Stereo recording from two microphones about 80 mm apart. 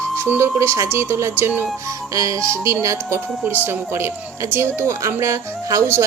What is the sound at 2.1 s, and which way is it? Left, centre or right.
A woman's voice, right.